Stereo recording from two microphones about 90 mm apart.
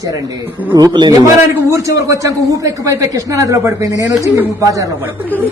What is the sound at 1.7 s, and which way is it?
A woman's voice, 35° right (ahead or behind).